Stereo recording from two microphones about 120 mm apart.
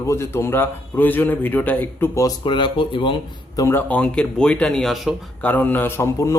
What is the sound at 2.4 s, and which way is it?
Speech, 45° left (ahead or behind).